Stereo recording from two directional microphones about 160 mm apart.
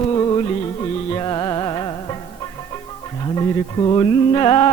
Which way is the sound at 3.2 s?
25° left (ahead or behind).